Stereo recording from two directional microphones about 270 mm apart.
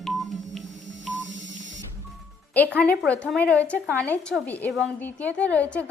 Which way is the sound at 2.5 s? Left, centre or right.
Centre.